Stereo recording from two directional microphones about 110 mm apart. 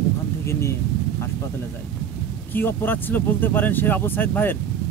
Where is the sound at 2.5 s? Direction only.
20° left (ahead or behind).